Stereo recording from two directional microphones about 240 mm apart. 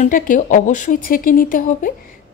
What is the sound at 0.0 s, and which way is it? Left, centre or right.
Speech, left.